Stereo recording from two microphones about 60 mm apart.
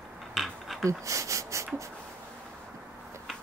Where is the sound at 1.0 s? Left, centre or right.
Right.